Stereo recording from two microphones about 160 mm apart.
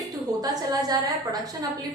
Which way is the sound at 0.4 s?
25° right (ahead or behind).